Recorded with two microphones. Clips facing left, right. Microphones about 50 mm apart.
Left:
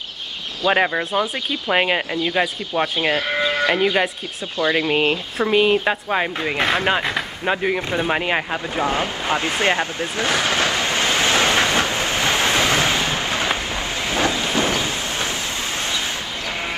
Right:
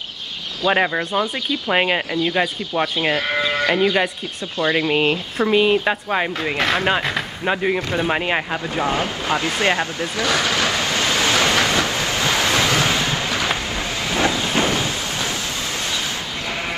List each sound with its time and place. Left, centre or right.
0.7 s speech: centre
6.5 s speech: left
7.4 s speech: centre
8.7 s vehicle: left
14.0 s train: left
14.6 s a sound: left